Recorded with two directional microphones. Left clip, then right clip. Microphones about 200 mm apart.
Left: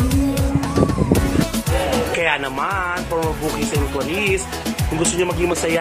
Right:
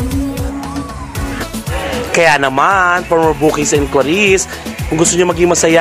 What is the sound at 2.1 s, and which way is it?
Speech, 45° right (ahead or behind).